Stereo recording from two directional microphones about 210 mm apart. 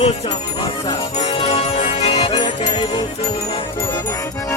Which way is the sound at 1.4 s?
30° left (ahead or behind).